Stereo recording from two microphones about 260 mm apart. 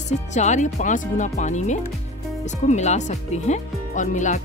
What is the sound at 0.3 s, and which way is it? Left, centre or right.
Speech, left.